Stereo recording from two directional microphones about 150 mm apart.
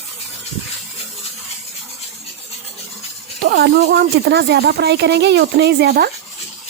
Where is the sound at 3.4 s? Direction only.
90° right.